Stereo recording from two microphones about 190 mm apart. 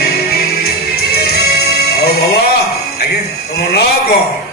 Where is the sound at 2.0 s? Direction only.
55° left (ahead or behind).